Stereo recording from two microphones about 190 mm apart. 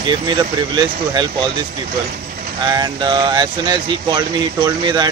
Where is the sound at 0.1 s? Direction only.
25° right (ahead or behind).